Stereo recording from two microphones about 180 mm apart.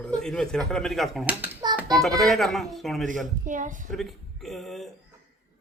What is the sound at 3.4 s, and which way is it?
Speech, 45° right (ahead or behind).